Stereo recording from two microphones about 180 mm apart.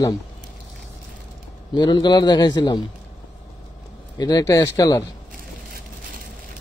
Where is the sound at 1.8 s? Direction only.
25° left (ahead or behind).